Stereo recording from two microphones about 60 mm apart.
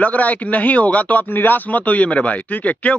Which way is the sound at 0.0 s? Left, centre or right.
Left.